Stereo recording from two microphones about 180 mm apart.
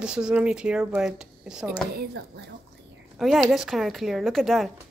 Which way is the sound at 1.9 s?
65° right (ahead or behind).